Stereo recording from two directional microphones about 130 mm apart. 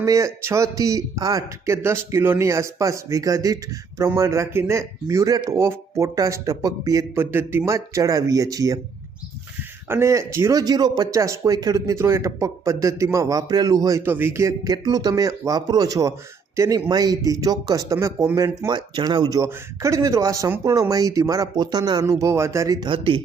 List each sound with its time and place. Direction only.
0.0 s speech: 25° right (ahead or behind)
9.9 s speech: 20° right (ahead or behind); by 23.2 s 40° right (ahead or behind)